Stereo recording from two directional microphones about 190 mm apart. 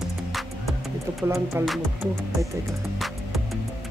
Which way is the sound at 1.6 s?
15° right (ahead or behind).